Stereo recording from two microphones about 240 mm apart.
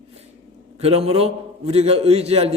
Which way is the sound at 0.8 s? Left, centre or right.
Right.